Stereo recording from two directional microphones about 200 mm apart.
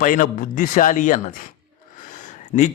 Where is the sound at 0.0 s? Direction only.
40° left (ahead or behind).